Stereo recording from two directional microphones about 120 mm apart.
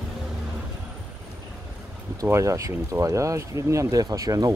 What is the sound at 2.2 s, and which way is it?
Speech, 25° right (ahead or behind).